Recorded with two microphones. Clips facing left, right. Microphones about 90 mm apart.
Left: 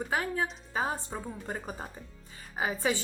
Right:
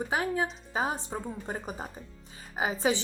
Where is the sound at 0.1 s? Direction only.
20° right (ahead or behind).